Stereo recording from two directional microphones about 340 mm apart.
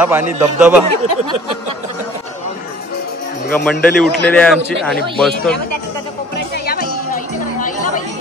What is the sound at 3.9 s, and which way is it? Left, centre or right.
A man's voice, centre.